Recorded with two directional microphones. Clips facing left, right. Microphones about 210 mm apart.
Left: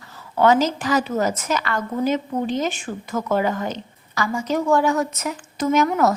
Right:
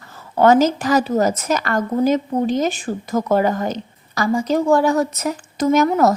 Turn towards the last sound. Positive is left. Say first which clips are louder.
# right 3 dB
turn(degrees=-40)  # may be behind; listen again after turning